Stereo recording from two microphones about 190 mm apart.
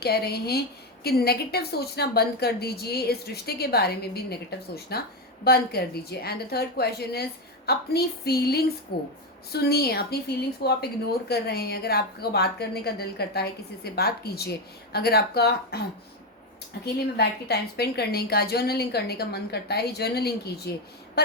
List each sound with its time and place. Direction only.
0.0 s a woman's voice: 55° left (ahead or behind)
16.8 s a woman's voice: 60° left (ahead or behind)